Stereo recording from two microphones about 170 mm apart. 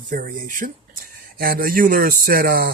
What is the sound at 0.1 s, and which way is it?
Speech, 55° right (ahead or behind).